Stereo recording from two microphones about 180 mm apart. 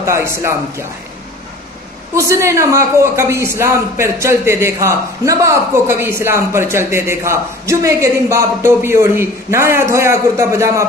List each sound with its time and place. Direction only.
0.0 s a man's voice: 15° right (ahead or behind)
2.1 s a man's voice: 15° right (ahead or behind)